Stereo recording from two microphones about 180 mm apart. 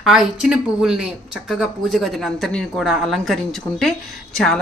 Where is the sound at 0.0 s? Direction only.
5° right (ahead or behind).